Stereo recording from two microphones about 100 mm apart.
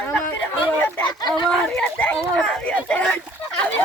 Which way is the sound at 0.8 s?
15° left (ahead or behind).